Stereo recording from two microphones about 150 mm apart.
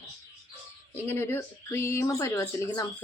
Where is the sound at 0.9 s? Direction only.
15° left (ahead or behind).